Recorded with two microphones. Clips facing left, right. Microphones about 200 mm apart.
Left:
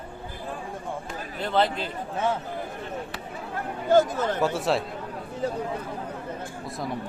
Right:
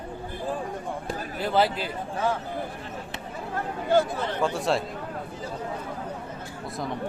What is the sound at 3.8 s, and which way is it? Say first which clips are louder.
Speech: left 3 dB; 45° left (ahead or behind).